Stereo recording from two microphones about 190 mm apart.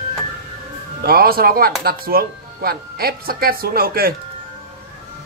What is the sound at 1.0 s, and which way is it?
Speech, 55° right (ahead or behind).